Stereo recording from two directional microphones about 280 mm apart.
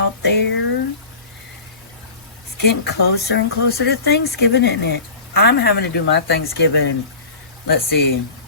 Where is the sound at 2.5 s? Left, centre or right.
Left.